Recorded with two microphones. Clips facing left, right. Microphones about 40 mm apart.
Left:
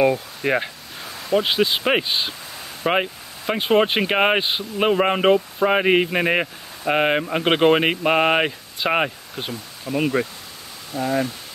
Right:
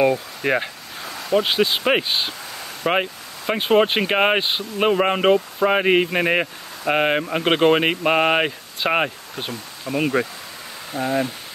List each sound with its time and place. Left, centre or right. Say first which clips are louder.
0.0 s speech: even; centre
10.9 s speech: even; right